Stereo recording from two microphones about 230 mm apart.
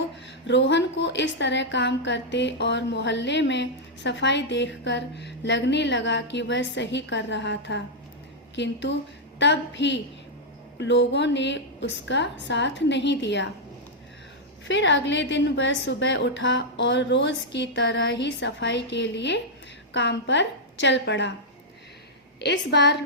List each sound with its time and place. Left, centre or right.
0.4 s speech: left
14.7 s speech: left
22.4 s speech: left